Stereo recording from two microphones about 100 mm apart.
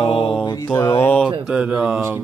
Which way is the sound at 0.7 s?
25° left (ahead or behind).